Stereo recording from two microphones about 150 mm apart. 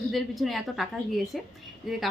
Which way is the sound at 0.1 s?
Centre (ahead or behind).